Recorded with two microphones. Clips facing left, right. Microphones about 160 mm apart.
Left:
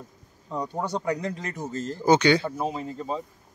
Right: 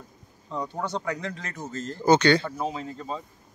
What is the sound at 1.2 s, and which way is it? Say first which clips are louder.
Speech: left 3 dB; 40° left (ahead or behind).